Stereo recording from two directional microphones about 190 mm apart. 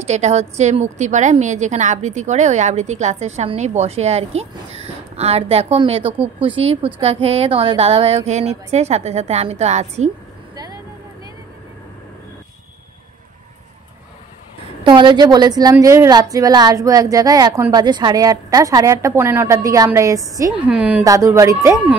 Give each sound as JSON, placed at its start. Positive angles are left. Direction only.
{"t": 0.0, "sound": "a woman's voice", "side_deg": -35}
{"t": 10.5, "sound": "vehicle", "side_deg": -20}
{"t": 14.8, "sound": "a woman's voice", "side_deg": -25}